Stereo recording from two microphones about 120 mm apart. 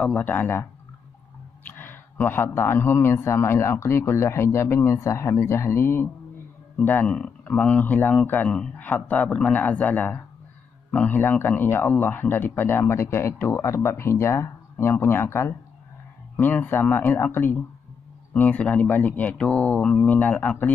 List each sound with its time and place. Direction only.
0.0 s speech: 10° left (ahead or behind)